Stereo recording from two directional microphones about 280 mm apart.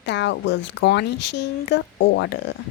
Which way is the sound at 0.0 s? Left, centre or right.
Left.